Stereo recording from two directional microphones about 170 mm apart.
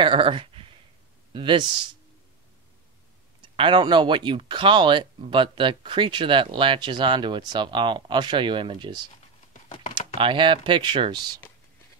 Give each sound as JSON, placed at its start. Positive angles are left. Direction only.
{"t": 0.0, "sound": "a sound", "side_deg": -30}
{"t": 1.3, "sound": "speech", "side_deg": -30}
{"t": 3.4, "sound": "speech", "side_deg": -30}
{"t": 10.1, "sound": "speech", "side_deg": -30}